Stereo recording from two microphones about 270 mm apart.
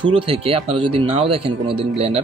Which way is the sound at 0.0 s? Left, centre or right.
Centre.